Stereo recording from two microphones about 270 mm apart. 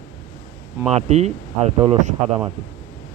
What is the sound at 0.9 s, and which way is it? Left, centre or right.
Speech, right.